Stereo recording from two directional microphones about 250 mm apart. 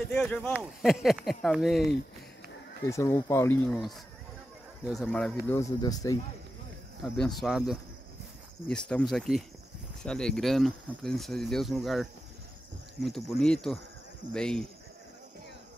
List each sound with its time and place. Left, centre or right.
0.1 s speech: centre
2.9 s speech: centre
5.5 s speech: centre
7.2 s speech: centre